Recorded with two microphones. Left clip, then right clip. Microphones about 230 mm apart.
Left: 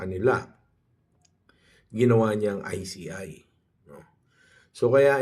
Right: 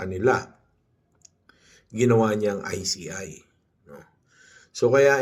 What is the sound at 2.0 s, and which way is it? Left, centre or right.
Speech, centre.